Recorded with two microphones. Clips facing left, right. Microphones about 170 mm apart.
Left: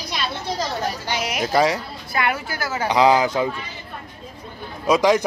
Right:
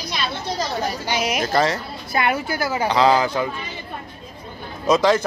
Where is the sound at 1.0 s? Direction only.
15° right (ahead or behind).